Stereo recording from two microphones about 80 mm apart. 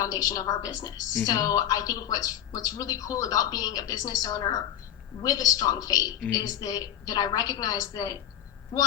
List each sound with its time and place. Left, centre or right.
0.0 s speech: left